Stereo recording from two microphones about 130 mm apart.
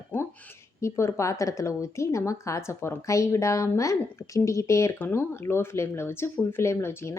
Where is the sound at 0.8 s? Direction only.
20° left (ahead or behind).